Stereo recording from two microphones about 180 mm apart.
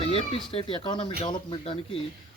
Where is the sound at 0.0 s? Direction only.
30° left (ahead or behind).